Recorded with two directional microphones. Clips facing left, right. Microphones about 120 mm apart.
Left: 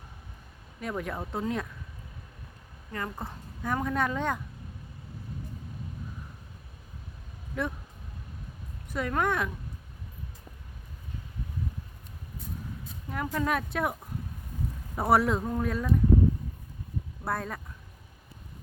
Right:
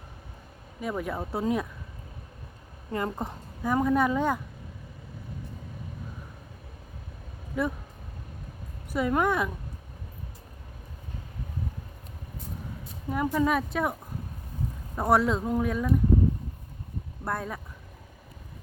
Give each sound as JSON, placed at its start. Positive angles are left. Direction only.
{"t": 0.8, "sound": "speech", "side_deg": -5}
{"t": 2.9, "sound": "a woman's voice", "side_deg": -20}
{"t": 3.6, "sound": "a woman's voice", "side_deg": -10}
{"t": 7.6, "sound": "speech", "side_deg": -5}
{"t": 8.9, "sound": "a woman's voice", "side_deg": -5}
{"t": 13.1, "sound": "speech", "side_deg": -5}
{"t": 14.9, "sound": "speech", "side_deg": 5}
{"t": 17.2, "sound": "speech", "side_deg": 0}